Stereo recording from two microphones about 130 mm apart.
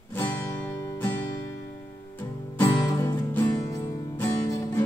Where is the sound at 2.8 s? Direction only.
25° left (ahead or behind).